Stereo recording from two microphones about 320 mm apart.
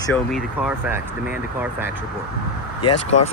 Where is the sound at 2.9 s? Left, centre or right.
Left.